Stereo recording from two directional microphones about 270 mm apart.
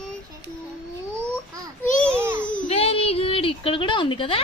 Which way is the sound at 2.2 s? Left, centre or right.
Centre.